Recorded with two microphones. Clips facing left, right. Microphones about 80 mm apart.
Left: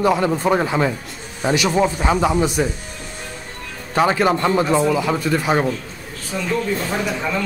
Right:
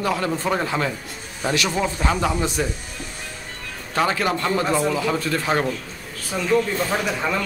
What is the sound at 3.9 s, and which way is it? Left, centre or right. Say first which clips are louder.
Speech: left 5 dB; left.